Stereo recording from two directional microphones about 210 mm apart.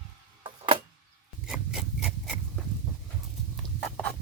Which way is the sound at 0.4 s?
25° right (ahead or behind).